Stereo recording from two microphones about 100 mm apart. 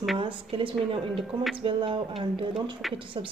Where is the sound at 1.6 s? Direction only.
60° right (ahead or behind).